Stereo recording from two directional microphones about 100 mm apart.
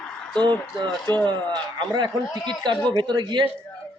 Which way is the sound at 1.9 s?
45° right (ahead or behind).